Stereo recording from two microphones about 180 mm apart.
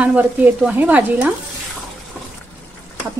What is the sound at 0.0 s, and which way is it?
Speech, 10° right (ahead or behind).